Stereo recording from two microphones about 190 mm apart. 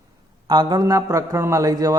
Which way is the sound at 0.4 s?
25° right (ahead or behind).